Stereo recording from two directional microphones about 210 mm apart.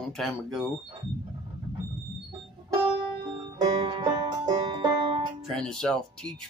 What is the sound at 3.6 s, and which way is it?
Music, 20° right (ahead or behind).